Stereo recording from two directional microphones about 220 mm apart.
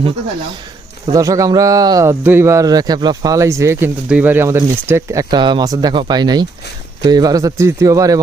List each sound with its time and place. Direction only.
1.1 s speech: 15° right (ahead or behind)